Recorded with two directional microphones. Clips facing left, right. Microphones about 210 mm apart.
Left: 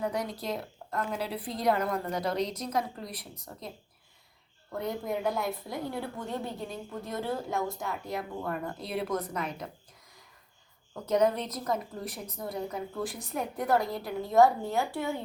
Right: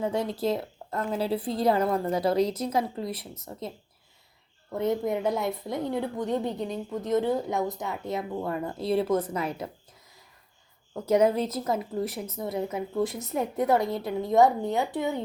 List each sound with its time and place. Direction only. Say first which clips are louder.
0.0 s speech: right 5 dB; 25° right (ahead or behind)
4.8 s speech: right 6 dB; 20° right (ahead or behind)
10.9 s speech: right 4 dB; 25° right (ahead or behind)